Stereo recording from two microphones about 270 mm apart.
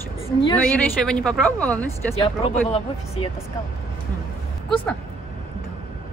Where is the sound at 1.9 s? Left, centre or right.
Left.